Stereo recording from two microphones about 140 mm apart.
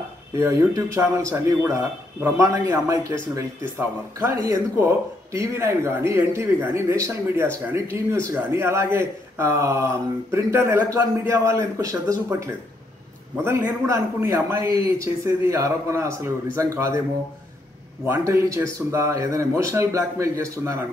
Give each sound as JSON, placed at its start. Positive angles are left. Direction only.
{"t": 0.4, "sound": "speech", "side_deg": -20}
{"t": 4.2, "sound": "speech", "side_deg": -20}
{"t": 18.0, "sound": "speech", "side_deg": -20}